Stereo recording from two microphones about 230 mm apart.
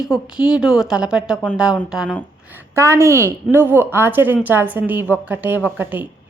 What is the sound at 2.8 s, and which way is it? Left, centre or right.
A woman's voice, centre.